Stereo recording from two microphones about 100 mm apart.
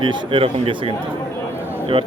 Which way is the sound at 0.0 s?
60° right (ahead or behind).